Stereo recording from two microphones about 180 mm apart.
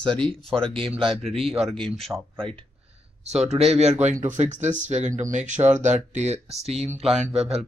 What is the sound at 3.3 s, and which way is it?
Speech, 35° right (ahead or behind).